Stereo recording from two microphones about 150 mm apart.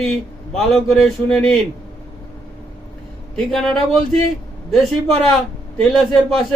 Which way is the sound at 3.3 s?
5° left (ahead or behind).